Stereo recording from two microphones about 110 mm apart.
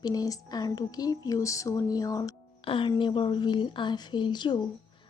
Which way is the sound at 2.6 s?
55° left (ahead or behind).